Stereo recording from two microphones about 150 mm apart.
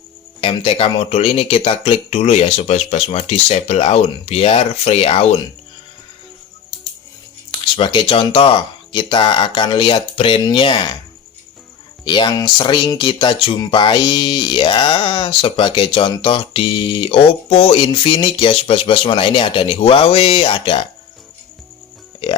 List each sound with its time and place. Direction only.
0.4 s speech: 40° left (ahead or behind)
7.8 s speech: 35° left (ahead or behind)
12.0 s speech: 30° left (ahead or behind)